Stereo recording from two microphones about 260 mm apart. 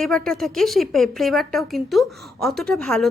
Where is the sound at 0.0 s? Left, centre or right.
Centre.